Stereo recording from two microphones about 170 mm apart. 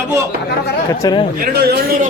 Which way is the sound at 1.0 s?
25° left (ahead or behind).